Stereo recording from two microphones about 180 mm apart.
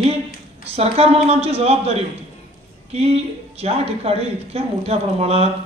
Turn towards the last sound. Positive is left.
turn(degrees=-35)  # may be behind; listen again after turning